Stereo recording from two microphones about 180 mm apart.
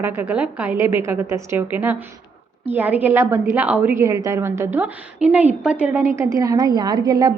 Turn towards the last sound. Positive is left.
turn(degrees=-20)  # may be behind; listen again after turning